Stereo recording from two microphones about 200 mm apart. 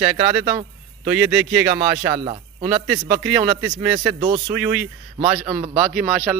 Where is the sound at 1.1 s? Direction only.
Centre (ahead or behind).